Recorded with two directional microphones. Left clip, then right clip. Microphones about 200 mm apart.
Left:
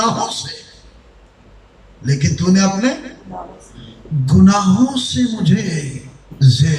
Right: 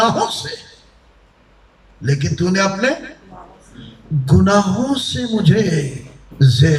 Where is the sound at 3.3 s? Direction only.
35° left (ahead or behind).